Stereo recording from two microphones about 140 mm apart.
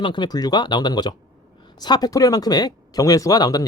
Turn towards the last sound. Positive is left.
turn(degrees=25)  # may be behind; listen again after turning